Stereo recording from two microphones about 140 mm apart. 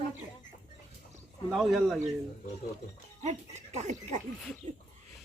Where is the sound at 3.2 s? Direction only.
55° right (ahead or behind).